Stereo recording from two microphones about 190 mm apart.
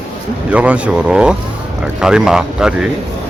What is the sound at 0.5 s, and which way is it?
Speech, 5° right (ahead or behind).